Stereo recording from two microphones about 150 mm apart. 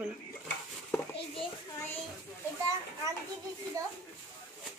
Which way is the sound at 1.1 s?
35° left (ahead or behind).